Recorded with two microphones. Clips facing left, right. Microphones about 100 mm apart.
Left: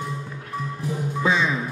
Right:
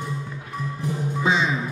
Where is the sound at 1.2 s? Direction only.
20° right (ahead or behind).